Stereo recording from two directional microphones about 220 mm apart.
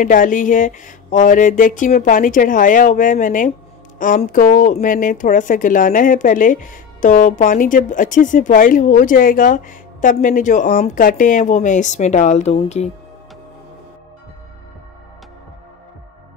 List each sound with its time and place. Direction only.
0.0 s speech: 35° left (ahead or behind)